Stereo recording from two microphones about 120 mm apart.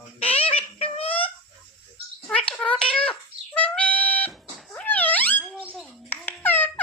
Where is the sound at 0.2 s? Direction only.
50° left (ahead or behind).